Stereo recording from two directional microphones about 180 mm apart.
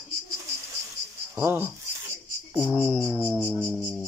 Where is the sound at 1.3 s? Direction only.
15° right (ahead or behind).